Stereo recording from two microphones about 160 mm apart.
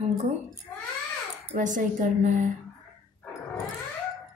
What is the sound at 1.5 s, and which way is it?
Speech, 55° right (ahead or behind).